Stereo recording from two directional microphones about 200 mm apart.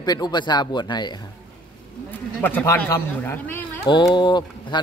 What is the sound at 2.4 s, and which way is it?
Speech, 10° left (ahead or behind).